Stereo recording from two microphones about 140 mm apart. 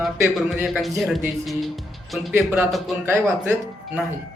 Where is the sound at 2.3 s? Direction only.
15° right (ahead or behind).